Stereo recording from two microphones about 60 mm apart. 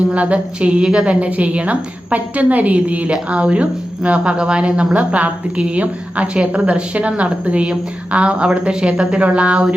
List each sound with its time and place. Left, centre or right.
0.0 s a woman's voice: right